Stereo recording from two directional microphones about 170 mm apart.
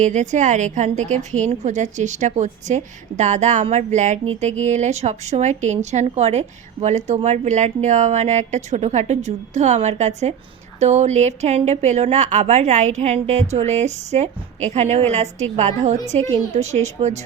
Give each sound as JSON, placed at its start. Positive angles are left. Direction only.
{"t": 0.0, "sound": "a woman's voice", "side_deg": -45}